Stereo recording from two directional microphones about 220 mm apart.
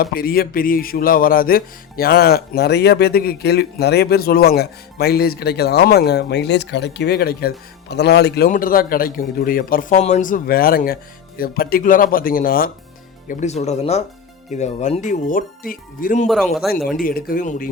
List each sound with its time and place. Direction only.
0.0 s a sound: 45° left (ahead or behind)
7.9 s a man's voice: 50° left (ahead or behind)
16.2 s speech: centre (ahead or behind)
17.0 s a man's voice: 40° left (ahead or behind)